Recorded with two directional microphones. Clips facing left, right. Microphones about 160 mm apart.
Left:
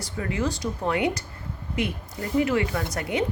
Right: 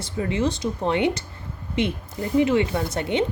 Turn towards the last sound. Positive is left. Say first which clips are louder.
# right 3 dB
turn(degrees=-25)  # may be behind; listen again after turning